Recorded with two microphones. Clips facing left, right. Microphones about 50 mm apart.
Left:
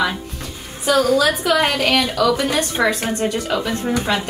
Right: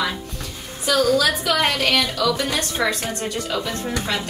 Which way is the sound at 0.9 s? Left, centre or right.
Centre.